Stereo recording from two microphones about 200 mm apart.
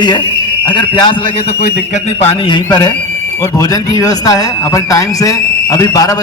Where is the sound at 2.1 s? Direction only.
30° left (ahead or behind).